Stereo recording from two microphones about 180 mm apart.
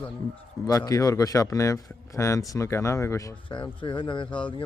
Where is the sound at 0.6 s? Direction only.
20° left (ahead or behind).